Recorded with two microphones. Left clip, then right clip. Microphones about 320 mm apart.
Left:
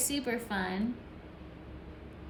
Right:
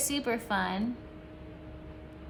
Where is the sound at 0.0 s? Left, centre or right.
Centre.